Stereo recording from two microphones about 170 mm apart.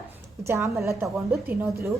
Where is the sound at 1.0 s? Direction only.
5° right (ahead or behind).